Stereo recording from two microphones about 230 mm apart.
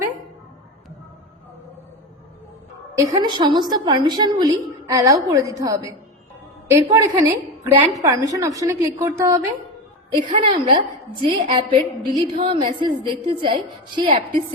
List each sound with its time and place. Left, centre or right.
3.0 s a woman's voice: centre